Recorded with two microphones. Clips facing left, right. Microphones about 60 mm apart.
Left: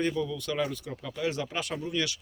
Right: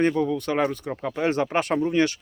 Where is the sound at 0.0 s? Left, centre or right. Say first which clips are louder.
Right 8 dB; right.